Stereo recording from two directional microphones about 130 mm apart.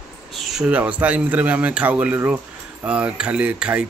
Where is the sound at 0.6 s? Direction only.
10° right (ahead or behind).